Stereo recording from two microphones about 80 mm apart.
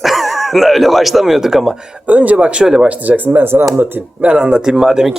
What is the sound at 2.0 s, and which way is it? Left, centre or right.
Speech, centre.